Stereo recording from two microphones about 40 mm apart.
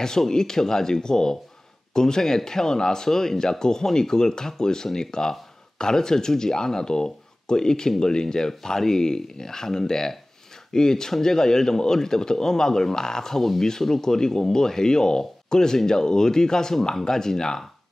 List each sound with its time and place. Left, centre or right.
0.0 s speech: centre